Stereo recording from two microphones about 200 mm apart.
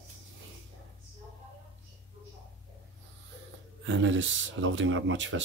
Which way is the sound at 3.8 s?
70° right (ahead or behind).